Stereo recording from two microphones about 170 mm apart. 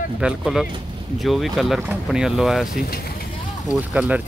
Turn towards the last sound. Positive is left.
turn(degrees=-10)  # may be behind; listen again after turning